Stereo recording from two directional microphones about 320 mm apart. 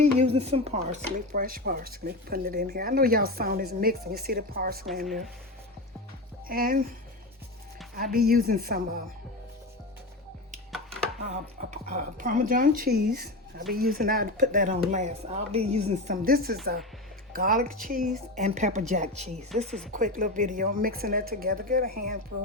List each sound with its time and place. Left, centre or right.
0.0 s dishes: centre
6.5 s dishes: right
7.9 s dishes: right
11.3 s dishes: right
19.6 s speech: centre
19.9 s dishes: right